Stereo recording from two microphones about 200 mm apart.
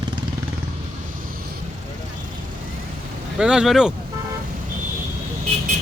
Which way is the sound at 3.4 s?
5° right (ahead or behind).